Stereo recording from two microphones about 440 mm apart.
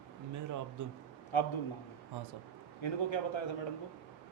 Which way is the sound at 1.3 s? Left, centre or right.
Left.